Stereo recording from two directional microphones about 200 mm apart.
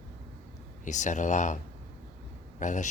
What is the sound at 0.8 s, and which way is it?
Speech, 40° left (ahead or behind).